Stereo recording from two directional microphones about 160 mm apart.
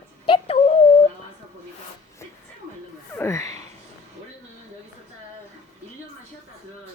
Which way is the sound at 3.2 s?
20° left (ahead or behind).